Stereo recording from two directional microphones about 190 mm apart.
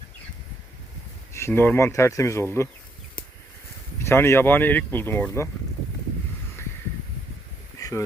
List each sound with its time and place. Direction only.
1.3 s speech: 15° left (ahead or behind)
4.0 s speech: 15° left (ahead or behind)
7.8 s a sound: 20° left (ahead or behind)